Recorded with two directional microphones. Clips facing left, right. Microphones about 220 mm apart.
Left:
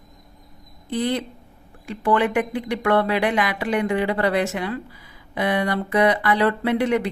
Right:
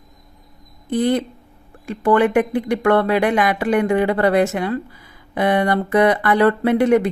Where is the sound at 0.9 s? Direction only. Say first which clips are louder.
Right 5 dB; 50° right (ahead or behind).